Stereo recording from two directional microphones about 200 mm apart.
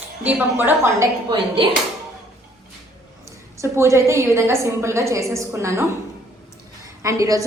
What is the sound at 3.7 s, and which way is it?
A woman's voice, 15° right (ahead or behind).